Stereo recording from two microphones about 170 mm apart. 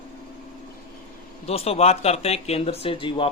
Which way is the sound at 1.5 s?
35° left (ahead or behind).